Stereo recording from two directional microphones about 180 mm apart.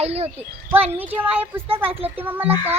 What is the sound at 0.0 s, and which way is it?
Speech, 35° right (ahead or behind).